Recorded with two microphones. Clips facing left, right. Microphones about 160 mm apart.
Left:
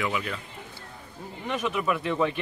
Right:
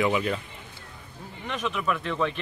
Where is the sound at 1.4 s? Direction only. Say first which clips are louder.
Left 1 dB; 5° left (ahead or behind).